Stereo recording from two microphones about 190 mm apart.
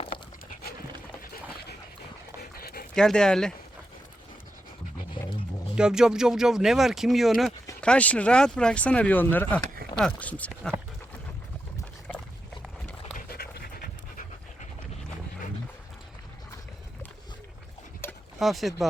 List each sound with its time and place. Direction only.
2.4 s dog: 55° left (ahead or behind)
2.9 s speech: 5° left (ahead or behind)
5.7 s speech: 5° right (ahead or behind)
13.1 s pant: 55° left (ahead or behind)
18.0 s a sound: 10° left (ahead or behind)
18.3 s speech: centre (ahead or behind)